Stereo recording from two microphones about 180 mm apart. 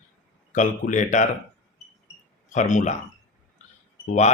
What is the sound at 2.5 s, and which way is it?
Speech, 40° left (ahead or behind).